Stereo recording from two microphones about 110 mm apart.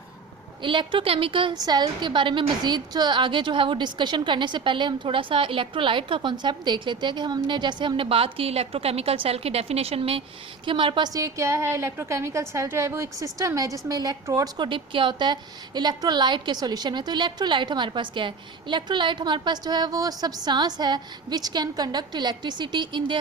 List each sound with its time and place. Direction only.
0.6 s a woman's voice: 50° right (ahead or behind)
1.5 s a woman's voice: 35° right (ahead or behind); by 10.2 s 60° right (ahead or behind)
10.7 s a woman's voice: 50° right (ahead or behind)
11.1 s a woman's voice: 30° right (ahead or behind)
14.7 s a woman's voice: 50° right (ahead or behind)